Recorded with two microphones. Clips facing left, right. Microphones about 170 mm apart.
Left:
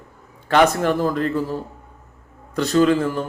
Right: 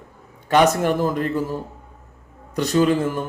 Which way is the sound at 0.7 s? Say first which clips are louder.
Even; 15° right (ahead or behind).